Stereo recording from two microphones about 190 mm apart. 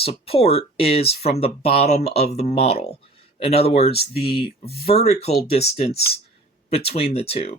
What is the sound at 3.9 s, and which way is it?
Speech, 55° left (ahead or behind).